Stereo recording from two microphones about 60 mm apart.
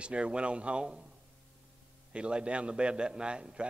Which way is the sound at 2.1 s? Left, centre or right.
Centre.